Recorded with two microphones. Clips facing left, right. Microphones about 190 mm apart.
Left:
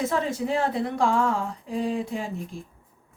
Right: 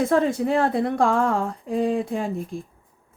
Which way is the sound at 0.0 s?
55° right (ahead or behind).